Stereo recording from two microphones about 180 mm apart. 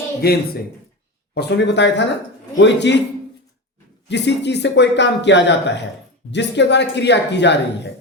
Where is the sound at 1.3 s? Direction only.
70° left (ahead or behind).